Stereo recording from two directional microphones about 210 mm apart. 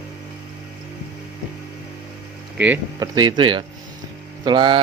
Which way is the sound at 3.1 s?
20° right (ahead or behind).